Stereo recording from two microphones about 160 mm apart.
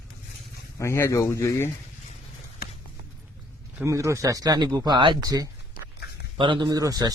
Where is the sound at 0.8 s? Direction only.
15° left (ahead or behind).